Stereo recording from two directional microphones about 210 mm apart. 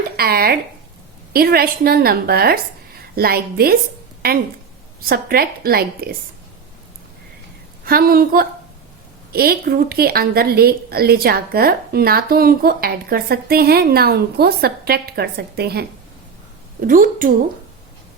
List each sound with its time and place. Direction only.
0.2 s a woman's voice: 45° right (ahead or behind)
7.9 s a woman's voice: 45° right (ahead or behind)